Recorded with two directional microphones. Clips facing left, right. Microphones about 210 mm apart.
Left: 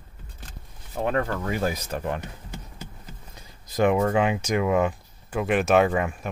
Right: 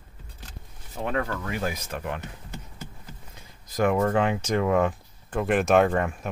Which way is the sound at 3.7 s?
20° left (ahead or behind).